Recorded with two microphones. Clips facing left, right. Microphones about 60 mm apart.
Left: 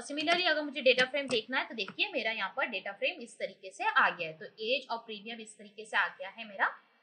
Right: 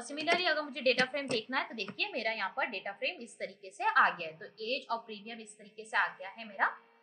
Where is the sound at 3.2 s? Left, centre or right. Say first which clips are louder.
Left 3 dB; left.